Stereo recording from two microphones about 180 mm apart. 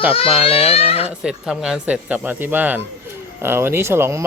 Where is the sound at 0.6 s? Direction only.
35° left (ahead or behind).